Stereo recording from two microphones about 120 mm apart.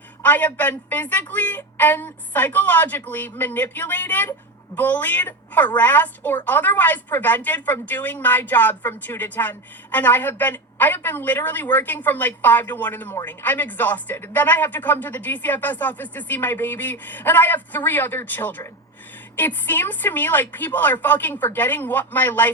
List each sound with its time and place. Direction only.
0.2 s speech: 15° left (ahead or behind)